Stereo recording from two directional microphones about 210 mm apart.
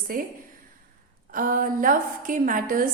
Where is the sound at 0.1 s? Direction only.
45° right (ahead or behind).